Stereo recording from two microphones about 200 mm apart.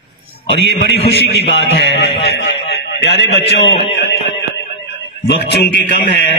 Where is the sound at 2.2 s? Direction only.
60° left (ahead or behind).